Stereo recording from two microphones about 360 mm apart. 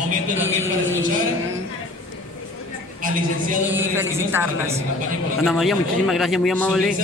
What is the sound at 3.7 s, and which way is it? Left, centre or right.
A man's voice, centre.